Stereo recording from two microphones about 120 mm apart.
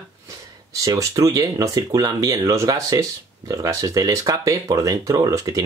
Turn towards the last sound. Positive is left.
turn(degrees=-30)  # may be behind; listen again after turning